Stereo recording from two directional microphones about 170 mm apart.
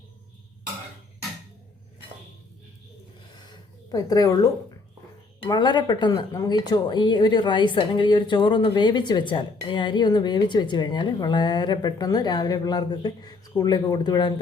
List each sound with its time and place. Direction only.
3.9 s speech: 20° left (ahead or behind)